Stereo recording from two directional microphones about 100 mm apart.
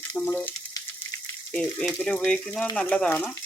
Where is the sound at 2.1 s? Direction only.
10° left (ahead or behind).